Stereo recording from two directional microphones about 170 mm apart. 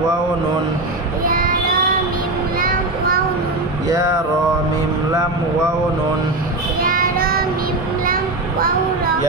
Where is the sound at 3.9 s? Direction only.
20° right (ahead or behind).